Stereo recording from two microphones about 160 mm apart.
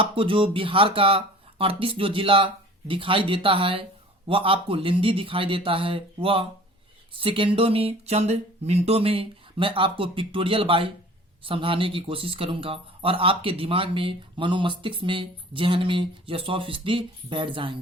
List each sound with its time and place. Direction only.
0.0 s speech: 35° right (ahead or behind)